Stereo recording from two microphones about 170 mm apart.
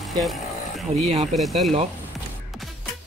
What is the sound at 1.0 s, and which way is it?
Speech, 40° right (ahead or behind).